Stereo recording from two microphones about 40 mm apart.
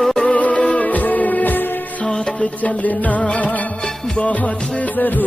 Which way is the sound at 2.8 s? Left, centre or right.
Left.